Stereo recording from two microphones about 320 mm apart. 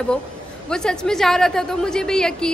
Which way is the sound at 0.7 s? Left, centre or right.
Centre.